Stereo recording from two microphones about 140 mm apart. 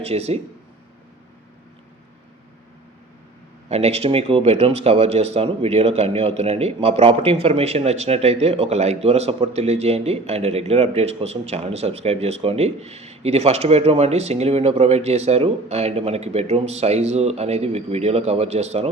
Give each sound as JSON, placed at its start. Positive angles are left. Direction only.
{"t": 0.0, "sound": "speech", "side_deg": -45}
{"t": 3.7, "sound": "speech", "side_deg": -50}